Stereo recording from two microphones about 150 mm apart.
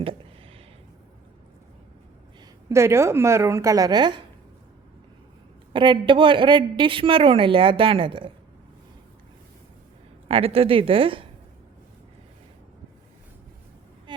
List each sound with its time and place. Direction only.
2.6 s a woman's voice: 20° right (ahead or behind)
5.7 s a woman's voice: 30° right (ahead or behind)
10.2 s a woman's voice: 40° right (ahead or behind)